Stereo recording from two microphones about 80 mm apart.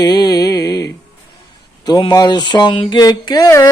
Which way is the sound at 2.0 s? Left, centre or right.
Left.